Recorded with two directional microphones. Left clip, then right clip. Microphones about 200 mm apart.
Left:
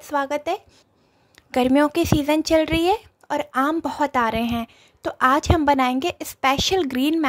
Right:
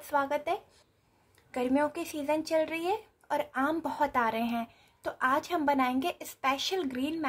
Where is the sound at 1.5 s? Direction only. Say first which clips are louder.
Left 11 dB; 45° left (ahead or behind).